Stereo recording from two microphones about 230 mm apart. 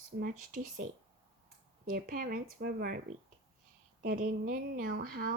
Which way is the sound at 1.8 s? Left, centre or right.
Right.